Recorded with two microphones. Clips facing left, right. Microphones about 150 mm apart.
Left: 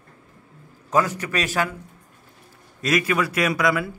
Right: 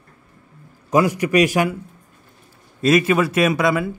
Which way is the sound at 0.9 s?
10° right (ahead or behind).